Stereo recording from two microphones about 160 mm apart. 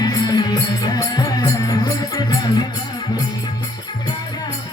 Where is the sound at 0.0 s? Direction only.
25° left (ahead or behind).